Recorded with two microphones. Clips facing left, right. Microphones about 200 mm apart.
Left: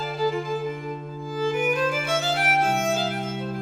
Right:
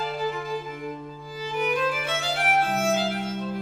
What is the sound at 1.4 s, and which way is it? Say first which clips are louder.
Music: left 3 dB; 50° left (ahead or behind).